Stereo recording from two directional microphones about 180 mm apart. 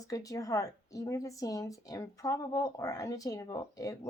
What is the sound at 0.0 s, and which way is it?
Speech, 20° left (ahead or behind).